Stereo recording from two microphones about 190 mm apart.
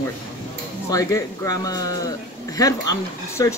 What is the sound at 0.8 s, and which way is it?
Speech, 15° left (ahead or behind).